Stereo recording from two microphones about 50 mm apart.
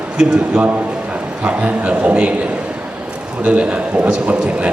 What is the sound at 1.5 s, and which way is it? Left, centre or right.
Speech, right.